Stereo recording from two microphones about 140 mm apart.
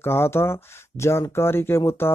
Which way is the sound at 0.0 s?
15° left (ahead or behind).